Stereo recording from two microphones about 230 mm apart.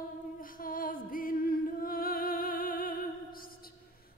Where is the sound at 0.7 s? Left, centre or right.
Left.